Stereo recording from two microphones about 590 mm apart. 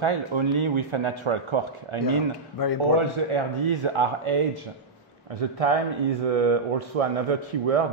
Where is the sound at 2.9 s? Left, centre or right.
Right.